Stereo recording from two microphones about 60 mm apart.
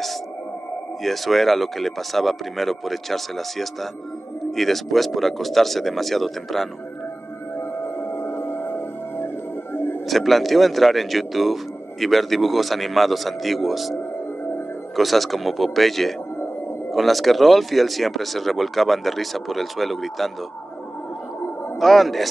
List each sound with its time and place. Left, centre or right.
1.0 s speech: centre
7.5 s music: left
10.0 s speech: centre
15.0 s speech: centre
21.7 s speech: centre